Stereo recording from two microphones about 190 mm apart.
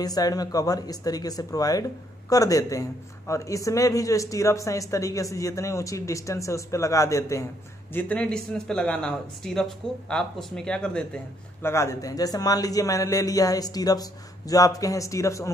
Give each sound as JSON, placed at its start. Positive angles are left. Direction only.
{"t": 0.0, "sound": "speech", "side_deg": 20}